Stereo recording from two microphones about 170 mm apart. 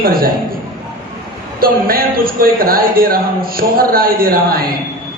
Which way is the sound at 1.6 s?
60° right (ahead or behind).